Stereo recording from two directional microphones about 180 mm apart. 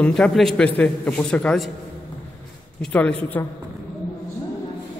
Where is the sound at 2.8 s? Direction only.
5° left (ahead or behind).